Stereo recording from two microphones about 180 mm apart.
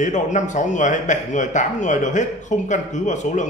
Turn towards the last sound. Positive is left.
turn(degrees=40)  # may be behind; listen again after turning